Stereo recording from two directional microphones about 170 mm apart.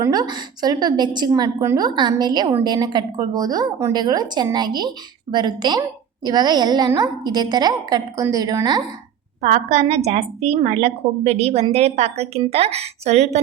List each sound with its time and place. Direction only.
0.0 s a woman's voice: 25° right (ahead or behind)
9.4 s a woman's voice: 40° right (ahead or behind)